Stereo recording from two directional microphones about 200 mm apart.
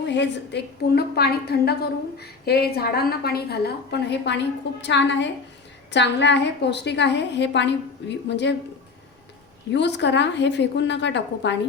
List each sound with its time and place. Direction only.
0.1 s a woman's voice: 60° left (ahead or behind)
9.7 s a woman's voice: 60° left (ahead or behind)